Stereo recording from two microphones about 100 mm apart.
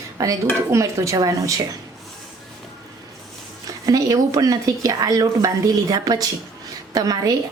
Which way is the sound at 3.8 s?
35° right (ahead or behind).